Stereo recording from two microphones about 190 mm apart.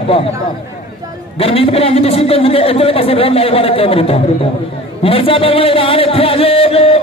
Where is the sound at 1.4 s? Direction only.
30° left (ahead or behind).